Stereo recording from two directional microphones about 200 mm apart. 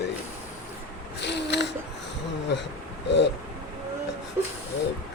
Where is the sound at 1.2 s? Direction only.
60° left (ahead or behind).